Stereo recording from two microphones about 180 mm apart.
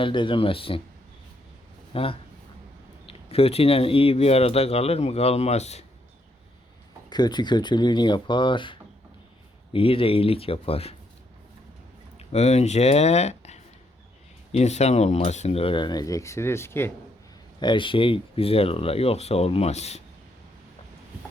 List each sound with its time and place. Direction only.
0.0 s speech: 30° left (ahead or behind)
1.9 s speech: 30° left (ahead or behind)
7.1 s speech: 25° left (ahead or behind)
12.3 s speech: 35° left (ahead or behind); by 16.9 s 15° left (ahead or behind)
17.6 s speech: 25° left (ahead or behind)